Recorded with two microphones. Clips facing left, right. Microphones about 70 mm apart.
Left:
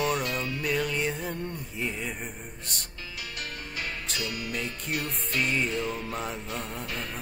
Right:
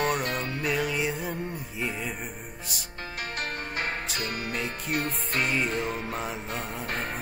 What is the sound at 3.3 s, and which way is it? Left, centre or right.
Music, right.